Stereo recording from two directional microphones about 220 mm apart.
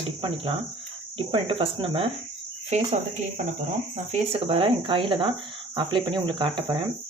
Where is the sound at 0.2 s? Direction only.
25° right (ahead or behind).